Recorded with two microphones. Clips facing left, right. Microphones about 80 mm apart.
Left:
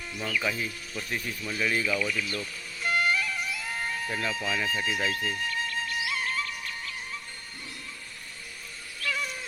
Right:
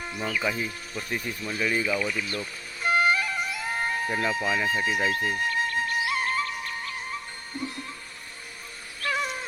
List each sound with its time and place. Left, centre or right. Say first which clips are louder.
0.2 s speech: right 2 dB; right
1.8 s music: right 1 dB; right
5.3 s music: right 5 dB; right
9.0 s cat: right 4 dB; right